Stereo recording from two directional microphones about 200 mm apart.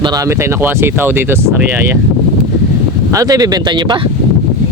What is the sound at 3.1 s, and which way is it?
Speech, 20° right (ahead or behind).